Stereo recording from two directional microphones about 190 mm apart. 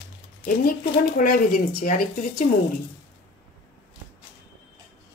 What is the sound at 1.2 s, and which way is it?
Speech, 50° left (ahead or behind).